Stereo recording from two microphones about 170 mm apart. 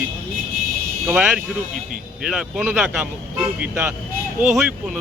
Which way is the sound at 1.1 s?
10° right (ahead or behind).